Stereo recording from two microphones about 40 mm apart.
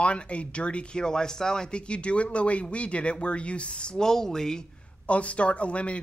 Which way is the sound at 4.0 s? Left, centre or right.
Centre.